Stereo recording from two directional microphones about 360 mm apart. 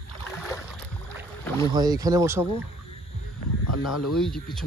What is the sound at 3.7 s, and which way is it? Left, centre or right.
Speech, left.